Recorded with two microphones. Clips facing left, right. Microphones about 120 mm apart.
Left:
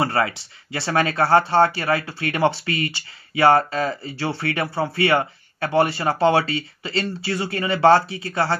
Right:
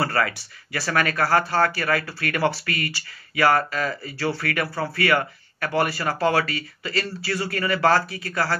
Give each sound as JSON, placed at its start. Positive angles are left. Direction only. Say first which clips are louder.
{"t": 0.0, "sound": "speech", "louder": "left 2 dB", "side_deg": 25}